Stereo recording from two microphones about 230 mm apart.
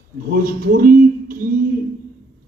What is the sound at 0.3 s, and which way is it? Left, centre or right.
Speech, right.